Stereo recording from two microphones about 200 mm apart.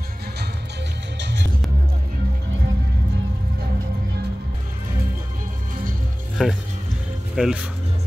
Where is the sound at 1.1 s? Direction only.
60° right (ahead or behind).